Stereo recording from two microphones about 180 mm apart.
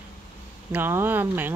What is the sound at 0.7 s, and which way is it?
Speech, 10° right (ahead or behind).